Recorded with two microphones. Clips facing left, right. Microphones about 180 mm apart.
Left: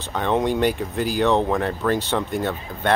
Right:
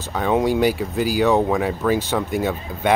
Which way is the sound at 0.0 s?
5° right (ahead or behind).